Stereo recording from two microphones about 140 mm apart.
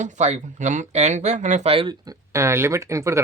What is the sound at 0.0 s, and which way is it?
Speech, 55° right (ahead or behind).